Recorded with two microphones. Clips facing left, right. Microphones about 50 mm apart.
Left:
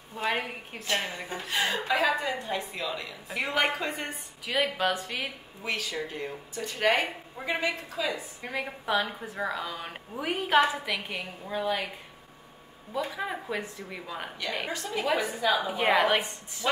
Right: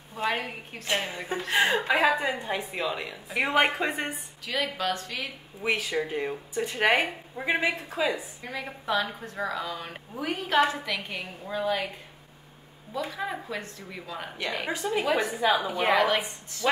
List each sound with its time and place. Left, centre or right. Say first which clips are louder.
0.1 s a woman's voice: right 1 dB; centre
0.8 s a woman's voice: right 2 dB; centre
4.5 s a woman's voice: left 2 dB; centre
5.6 s a woman's voice: right 5 dB; right
8.5 s a woman's voice: left 1 dB; centre
12.9 s a woman's voice: even; centre
14.7 s a woman's voice: right 4 dB; centre
15.0 s speech: even; centre
15.3 s a woman's voice: right 2 dB; centre
15.8 s speech: even; centre